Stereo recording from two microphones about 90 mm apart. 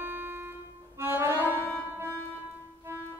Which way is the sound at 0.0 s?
20° right (ahead or behind).